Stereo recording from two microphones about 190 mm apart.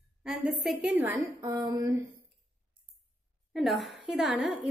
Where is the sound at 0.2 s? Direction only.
Centre (ahead or behind).